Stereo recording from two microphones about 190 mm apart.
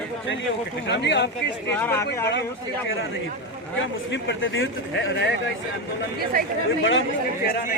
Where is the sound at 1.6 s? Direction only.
10° left (ahead or behind).